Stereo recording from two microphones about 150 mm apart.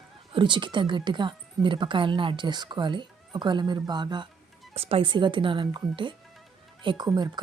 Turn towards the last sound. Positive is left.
turn(degrees=-25)  # may be behind; listen again after turning